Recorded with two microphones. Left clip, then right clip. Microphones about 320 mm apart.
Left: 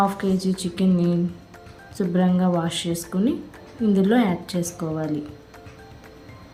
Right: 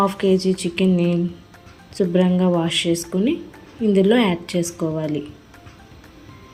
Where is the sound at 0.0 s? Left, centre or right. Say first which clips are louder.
Right 4 dB; centre.